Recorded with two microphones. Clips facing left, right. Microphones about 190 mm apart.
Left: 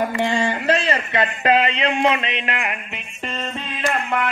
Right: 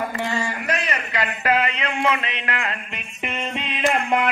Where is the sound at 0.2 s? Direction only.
25° left (ahead or behind).